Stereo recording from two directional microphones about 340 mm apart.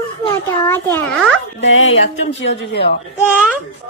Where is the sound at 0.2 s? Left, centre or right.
Centre.